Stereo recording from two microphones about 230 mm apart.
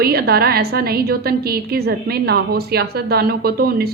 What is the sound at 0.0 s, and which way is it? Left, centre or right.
A woman's voice, right.